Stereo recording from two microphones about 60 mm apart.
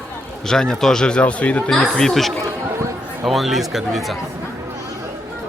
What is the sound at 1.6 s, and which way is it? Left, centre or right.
Speech, centre.